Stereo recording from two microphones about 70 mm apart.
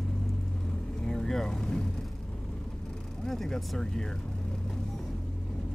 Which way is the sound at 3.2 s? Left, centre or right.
Centre.